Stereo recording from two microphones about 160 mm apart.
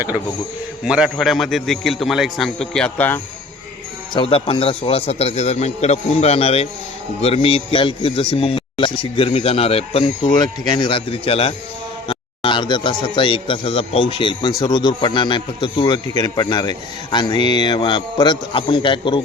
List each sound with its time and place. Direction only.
0.9 s a man's voice: 5° right (ahead or behind)
4.1 s a man's voice: 35° left (ahead or behind)